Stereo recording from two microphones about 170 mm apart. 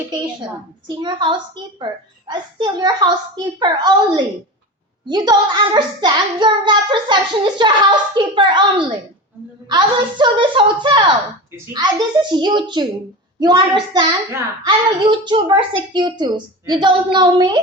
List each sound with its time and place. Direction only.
0.9 s child singing: 25° right (ahead or behind)